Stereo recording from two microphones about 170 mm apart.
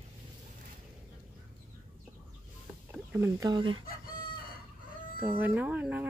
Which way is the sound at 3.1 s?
15° right (ahead or behind).